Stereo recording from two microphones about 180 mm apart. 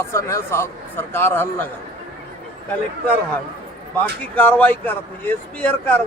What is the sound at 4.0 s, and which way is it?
A man's voice, 10° left (ahead or behind).